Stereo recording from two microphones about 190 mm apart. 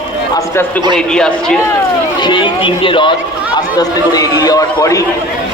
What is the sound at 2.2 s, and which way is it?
A man's voice, 25° left (ahead or behind).